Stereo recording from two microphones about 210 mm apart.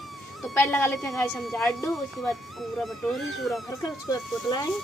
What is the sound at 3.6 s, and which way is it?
Speech, 20° left (ahead or behind).